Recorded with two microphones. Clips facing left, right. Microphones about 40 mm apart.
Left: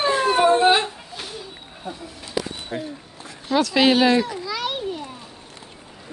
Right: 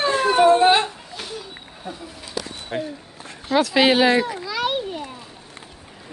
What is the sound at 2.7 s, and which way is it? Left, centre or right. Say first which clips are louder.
Speech: right 3 dB; right.